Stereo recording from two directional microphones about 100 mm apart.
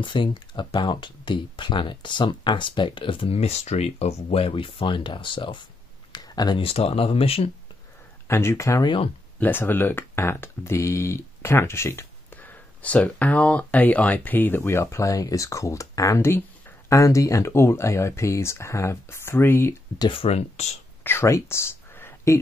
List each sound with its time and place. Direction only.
0.0 s speech: 55° left (ahead or behind)
6.1 s a sound: 40° left (ahead or behind)
6.6 s speech: 75° left (ahead or behind)
8.3 s speech: 25° left (ahead or behind)
8.8 s speech: 60° left (ahead or behind)
9.4 s speech: 20° left (ahead or behind)
20.1 s speech: 80° left
21.0 s a sound: 25° left (ahead or behind)